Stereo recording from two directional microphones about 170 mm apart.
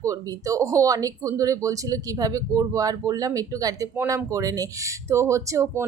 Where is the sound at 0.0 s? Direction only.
20° right (ahead or behind).